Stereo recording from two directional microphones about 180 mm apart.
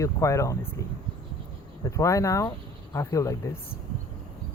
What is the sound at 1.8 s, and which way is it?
Speech, 15° left (ahead or behind).